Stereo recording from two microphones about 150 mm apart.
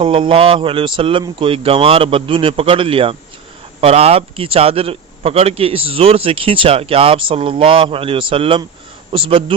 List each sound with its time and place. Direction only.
0.0 s a man's voice: 35° right (ahead or behind)